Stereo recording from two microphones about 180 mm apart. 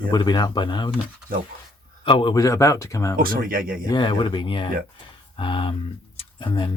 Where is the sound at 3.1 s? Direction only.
50° right (ahead or behind).